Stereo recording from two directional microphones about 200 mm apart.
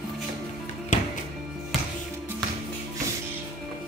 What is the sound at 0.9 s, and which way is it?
Music, 40° left (ahead or behind).